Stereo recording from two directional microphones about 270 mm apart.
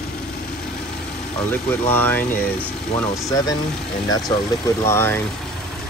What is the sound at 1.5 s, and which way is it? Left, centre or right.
Speech, centre.